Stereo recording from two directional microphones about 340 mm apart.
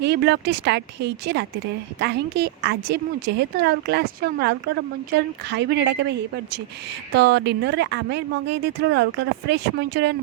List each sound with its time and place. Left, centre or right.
0.0 s a woman's voice: right